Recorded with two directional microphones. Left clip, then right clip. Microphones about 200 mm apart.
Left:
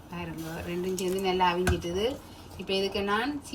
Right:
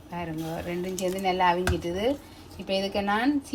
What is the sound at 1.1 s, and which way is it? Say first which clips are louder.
Speech: right 3 dB; 45° right (ahead or behind).